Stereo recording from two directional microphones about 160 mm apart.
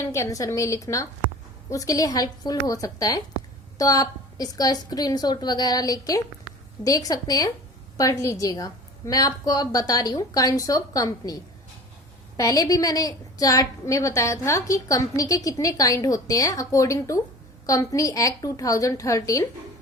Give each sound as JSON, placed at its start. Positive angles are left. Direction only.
{"t": 0.0, "sound": "a woman's voice", "side_deg": 15}
{"t": 12.4, "sound": "a woman's voice", "side_deg": 20}